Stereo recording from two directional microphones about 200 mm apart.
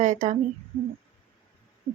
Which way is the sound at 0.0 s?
40° right (ahead or behind).